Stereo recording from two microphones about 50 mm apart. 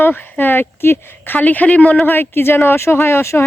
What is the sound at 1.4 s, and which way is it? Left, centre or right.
Speech, left.